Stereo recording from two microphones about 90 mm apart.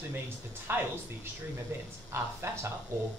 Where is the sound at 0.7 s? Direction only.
25° right (ahead or behind).